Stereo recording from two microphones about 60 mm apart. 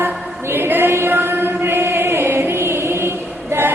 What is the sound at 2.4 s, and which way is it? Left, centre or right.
Chant, right.